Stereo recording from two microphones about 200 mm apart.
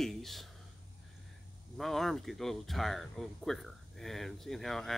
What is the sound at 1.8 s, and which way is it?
Speech, centre (ahead or behind).